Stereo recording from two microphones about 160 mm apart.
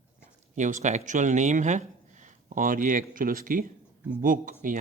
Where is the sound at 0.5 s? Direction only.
50° right (ahead or behind).